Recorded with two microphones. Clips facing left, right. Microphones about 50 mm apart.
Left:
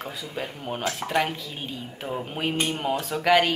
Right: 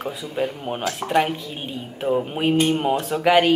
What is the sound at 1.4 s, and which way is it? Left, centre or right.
Speech, right.